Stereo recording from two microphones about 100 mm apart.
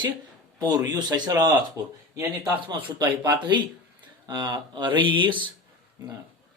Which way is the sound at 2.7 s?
45° right (ahead or behind).